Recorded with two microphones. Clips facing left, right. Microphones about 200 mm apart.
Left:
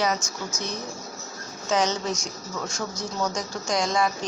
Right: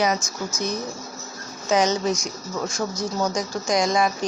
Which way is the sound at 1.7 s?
15° right (ahead or behind).